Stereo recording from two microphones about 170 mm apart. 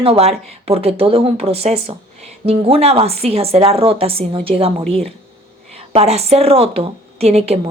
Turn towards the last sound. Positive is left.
turn(degrees=-35)  # may be behind; listen again after turning